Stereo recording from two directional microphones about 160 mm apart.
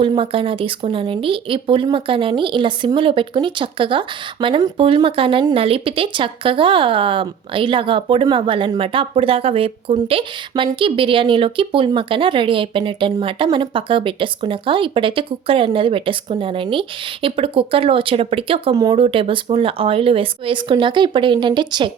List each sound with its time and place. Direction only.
0.0 s speech: 35° right (ahead or behind)